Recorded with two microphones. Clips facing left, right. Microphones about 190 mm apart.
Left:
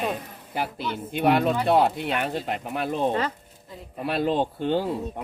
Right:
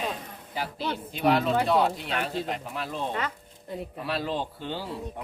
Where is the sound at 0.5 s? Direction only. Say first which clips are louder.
Left 2 dB; 55° left (ahead or behind).